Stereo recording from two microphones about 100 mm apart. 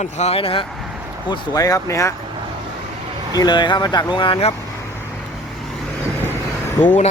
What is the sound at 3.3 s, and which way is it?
Speech, 45° left (ahead or behind).